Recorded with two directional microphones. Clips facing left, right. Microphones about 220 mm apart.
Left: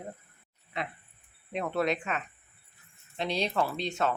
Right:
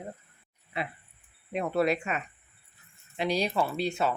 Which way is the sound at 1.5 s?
5° right (ahead or behind).